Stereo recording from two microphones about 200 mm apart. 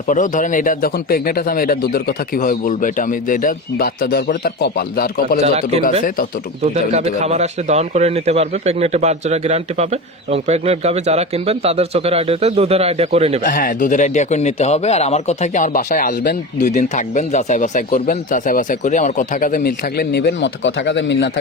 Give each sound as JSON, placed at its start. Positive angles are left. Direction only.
{"t": 0.1, "sound": "a man's voice", "side_deg": 40}
{"t": 5.4, "sound": "a man's voice", "side_deg": -35}
{"t": 6.9, "sound": "a man's voice", "side_deg": -35}
{"t": 13.4, "sound": "speech", "side_deg": 45}